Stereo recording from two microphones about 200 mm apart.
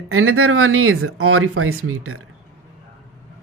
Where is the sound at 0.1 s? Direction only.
90° right.